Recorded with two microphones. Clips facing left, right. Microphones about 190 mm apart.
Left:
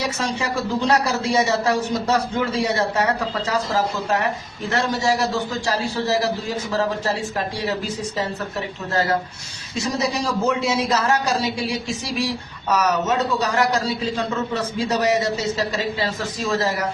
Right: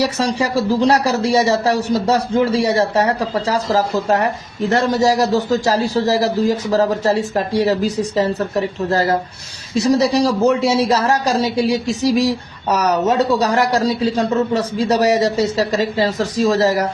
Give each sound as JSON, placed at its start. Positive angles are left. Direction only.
{"t": 0.2, "sound": "speech", "side_deg": -35}